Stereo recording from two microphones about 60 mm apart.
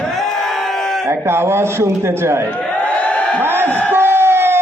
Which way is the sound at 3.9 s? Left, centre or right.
Right.